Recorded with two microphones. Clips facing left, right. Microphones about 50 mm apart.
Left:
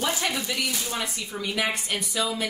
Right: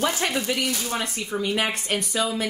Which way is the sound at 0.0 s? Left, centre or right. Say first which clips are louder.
Right 3 dB; right.